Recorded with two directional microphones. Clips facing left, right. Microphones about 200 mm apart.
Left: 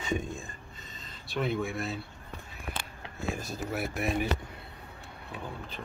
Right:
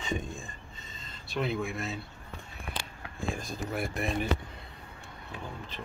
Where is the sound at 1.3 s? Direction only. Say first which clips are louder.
Left 1 dB; centre (ahead or behind).